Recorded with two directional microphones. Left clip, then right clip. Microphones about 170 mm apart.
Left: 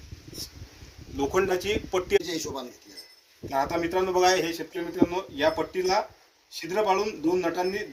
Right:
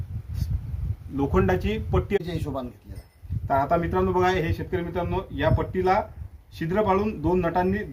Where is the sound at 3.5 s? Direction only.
15° left (ahead or behind).